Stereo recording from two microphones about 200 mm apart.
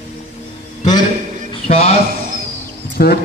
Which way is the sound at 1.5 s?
30° left (ahead or behind).